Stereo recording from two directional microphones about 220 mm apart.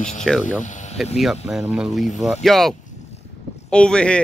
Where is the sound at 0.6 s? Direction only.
35° left (ahead or behind).